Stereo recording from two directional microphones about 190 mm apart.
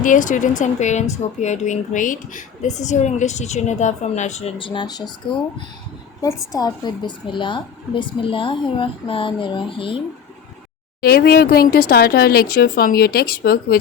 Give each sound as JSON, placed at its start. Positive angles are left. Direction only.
{"t": 0.0, "sound": "speech", "side_deg": 45}
{"t": 6.5, "sound": "a woman's voice", "side_deg": 20}
{"t": 11.0, "sound": "speech", "side_deg": 55}